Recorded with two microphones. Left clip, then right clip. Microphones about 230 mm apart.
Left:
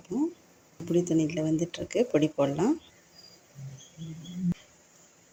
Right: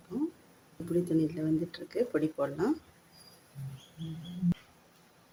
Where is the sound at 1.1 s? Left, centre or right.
Centre.